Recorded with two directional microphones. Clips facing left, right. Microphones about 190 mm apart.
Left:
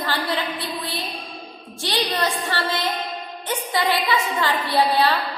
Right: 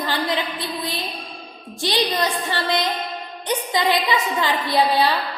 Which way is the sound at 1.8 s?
15° right (ahead or behind).